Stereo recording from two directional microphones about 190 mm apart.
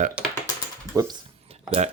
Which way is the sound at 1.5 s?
35° right (ahead or behind).